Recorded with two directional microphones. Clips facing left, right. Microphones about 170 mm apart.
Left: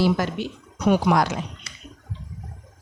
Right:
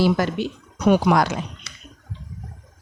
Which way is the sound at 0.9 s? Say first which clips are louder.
Right 2 dB; 75° right (ahead or behind).